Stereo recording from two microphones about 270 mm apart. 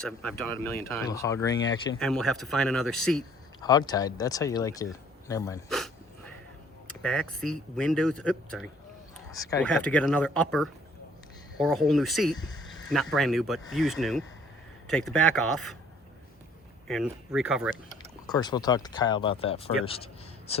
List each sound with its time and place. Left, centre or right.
0.0 s speech: centre
3.6 s speech: centre
5.6 s a sound: centre
6.8 s speech: centre
16.9 s speech: centre
18.3 s speech: centre